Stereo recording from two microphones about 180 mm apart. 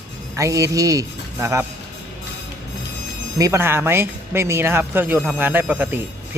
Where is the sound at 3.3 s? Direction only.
15° right (ahead or behind).